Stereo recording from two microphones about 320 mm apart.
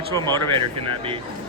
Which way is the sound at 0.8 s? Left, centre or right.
Centre.